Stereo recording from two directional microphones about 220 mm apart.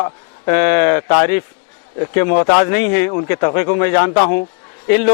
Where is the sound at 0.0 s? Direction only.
20° left (ahead or behind).